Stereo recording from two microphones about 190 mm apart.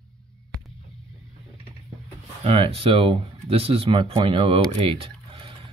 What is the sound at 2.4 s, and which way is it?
Speech, 30° right (ahead or behind).